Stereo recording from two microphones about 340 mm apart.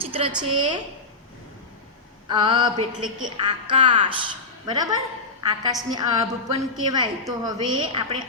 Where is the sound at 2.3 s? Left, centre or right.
Centre.